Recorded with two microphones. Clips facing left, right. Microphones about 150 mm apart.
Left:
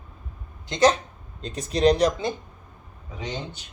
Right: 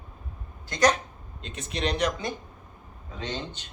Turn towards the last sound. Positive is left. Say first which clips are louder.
# left 1 dB
turn(degrees=10)  # may be behind; listen again after turning